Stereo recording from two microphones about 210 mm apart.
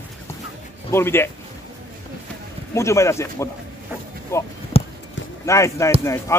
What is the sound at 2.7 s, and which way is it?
A man's voice, 15° left (ahead or behind).